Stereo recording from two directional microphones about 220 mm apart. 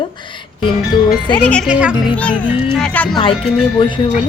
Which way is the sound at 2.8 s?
5° left (ahead or behind).